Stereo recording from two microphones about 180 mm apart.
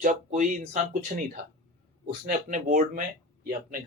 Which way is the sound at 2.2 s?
45° right (ahead or behind).